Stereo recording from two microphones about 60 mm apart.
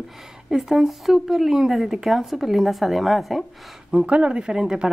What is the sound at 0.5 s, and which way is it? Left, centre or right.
Speech, centre.